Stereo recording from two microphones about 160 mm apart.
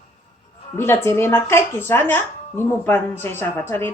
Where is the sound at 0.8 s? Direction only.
15° left (ahead or behind).